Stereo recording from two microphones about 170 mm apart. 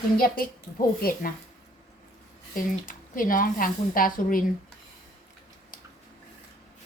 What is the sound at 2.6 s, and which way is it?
Speech, 55° left (ahead or behind).